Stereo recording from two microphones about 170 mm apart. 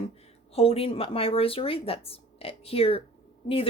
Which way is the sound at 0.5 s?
35° left (ahead or behind).